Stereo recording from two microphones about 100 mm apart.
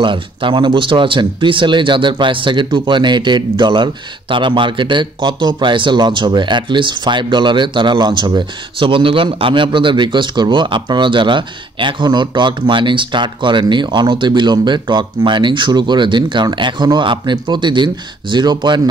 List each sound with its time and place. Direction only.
0.0 s speech: 55° right (ahead or behind)